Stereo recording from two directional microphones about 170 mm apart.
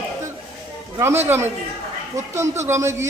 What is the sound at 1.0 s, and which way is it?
A man's voice, 15° right (ahead or behind).